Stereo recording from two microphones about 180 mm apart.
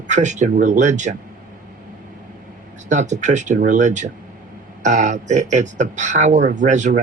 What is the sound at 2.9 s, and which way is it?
Speech, 40° right (ahead or behind).